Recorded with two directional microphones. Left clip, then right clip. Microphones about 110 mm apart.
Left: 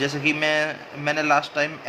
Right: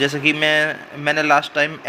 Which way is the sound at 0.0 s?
50° right (ahead or behind).